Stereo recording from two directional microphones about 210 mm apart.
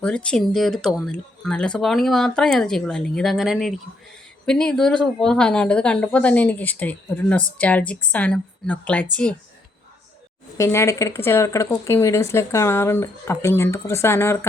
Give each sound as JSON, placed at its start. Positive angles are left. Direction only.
{"t": 0.0, "sound": "speech", "side_deg": 5}
{"t": 10.6, "sound": "speech", "side_deg": 15}